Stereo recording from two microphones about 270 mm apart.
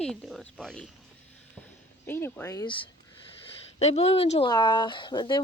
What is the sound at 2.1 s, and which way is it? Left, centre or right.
Speech, centre.